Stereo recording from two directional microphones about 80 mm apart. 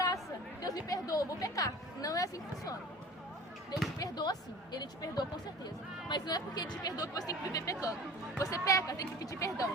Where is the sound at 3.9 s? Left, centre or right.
Left.